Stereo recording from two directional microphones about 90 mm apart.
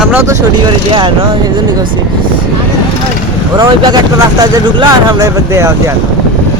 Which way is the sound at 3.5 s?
55° right (ahead or behind).